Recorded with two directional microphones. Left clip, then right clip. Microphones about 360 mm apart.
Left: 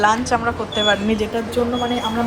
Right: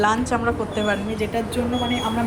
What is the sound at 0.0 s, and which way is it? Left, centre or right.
Speech, centre.